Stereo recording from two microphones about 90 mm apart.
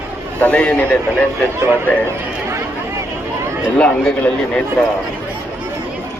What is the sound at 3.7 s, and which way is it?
Speech, 10° left (ahead or behind).